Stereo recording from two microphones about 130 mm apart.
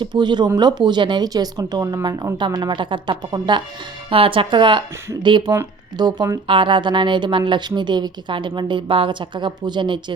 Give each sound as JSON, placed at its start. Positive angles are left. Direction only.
{"t": 0.0, "sound": "a woman's voice", "side_deg": -35}